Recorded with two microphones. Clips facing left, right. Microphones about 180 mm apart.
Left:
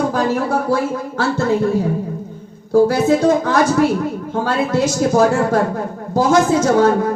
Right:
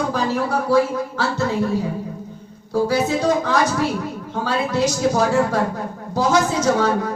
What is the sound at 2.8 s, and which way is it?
Speech, 50° left (ahead or behind).